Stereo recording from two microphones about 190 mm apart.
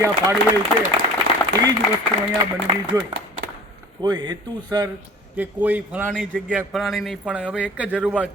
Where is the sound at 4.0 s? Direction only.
25° right (ahead or behind).